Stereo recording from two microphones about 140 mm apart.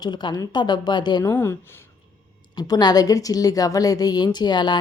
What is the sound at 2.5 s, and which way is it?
A woman's voice, 30° left (ahead or behind).